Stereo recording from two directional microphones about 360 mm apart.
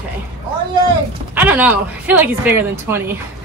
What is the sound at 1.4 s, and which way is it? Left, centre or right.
A woman's voice, centre.